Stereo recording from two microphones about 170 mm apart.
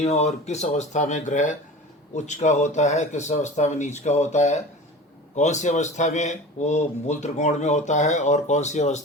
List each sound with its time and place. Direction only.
0.0 s a man's voice: 40° left (ahead or behind)